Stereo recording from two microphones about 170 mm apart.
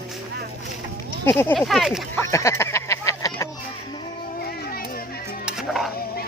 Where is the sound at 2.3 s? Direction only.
15° left (ahead or behind).